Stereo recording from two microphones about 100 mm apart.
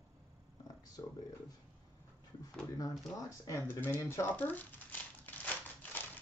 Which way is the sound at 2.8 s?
35° left (ahead or behind).